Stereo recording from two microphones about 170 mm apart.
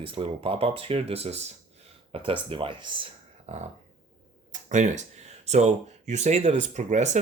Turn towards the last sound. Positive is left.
turn(degrees=-45)  # may be behind; listen again after turning